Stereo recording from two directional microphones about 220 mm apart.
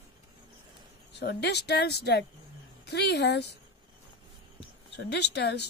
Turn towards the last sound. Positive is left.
turn(degrees=50)  # may be behind; listen again after turning